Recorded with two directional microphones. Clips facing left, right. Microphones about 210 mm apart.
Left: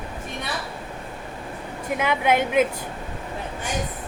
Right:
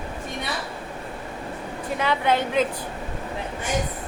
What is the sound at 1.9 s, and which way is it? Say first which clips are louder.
Speech: left 1 dB; 15° left (ahead or behind).